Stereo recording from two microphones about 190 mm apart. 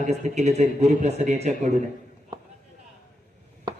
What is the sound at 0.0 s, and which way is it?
A man's voice, 40° right (ahead or behind).